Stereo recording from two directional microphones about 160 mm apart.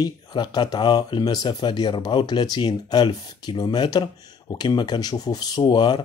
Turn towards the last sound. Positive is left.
turn(degrees=25)  # may be behind; listen again after turning